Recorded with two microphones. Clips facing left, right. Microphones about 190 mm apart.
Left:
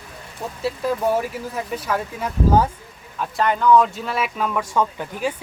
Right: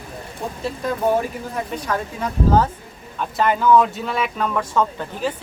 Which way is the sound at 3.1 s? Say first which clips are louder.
Right 1 dB; centre (ahead or behind).